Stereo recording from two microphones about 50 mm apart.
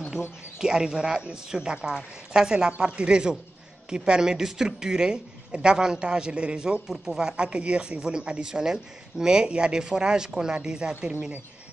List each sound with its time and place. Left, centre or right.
0.6 s speech: centre